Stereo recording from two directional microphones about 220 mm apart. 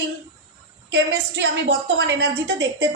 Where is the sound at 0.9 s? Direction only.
50° right (ahead or behind).